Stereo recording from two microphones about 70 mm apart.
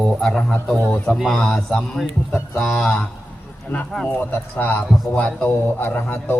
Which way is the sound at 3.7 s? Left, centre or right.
Left.